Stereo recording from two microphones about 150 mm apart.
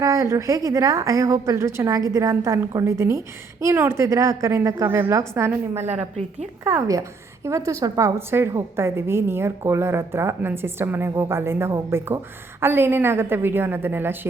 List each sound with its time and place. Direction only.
0.0 s a woman's voice: 20° right (ahead or behind)
5.8 s a woman's voice: 50° right (ahead or behind)
6.7 s a woman's voice: 20° right (ahead or behind)